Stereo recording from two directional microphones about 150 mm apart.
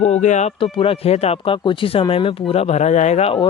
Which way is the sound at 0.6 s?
35° left (ahead or behind).